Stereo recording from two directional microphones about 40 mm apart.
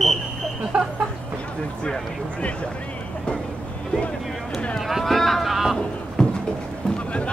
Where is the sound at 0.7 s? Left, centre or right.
Right.